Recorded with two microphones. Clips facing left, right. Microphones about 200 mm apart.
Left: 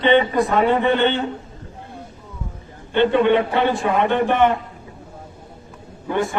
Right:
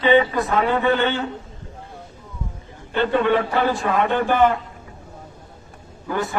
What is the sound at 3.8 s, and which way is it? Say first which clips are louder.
Speech: left 2 dB; 25° left (ahead or behind).